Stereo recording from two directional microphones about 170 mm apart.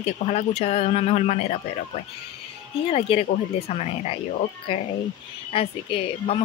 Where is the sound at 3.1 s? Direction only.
35° left (ahead or behind).